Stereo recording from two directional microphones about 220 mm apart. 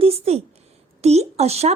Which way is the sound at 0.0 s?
25° right (ahead or behind).